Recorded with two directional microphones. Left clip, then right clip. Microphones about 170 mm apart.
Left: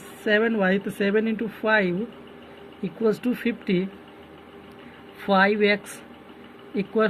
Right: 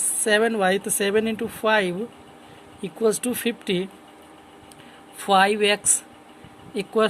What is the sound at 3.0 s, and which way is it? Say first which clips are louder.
Speech: right 2 dB; 55° right (ahead or behind).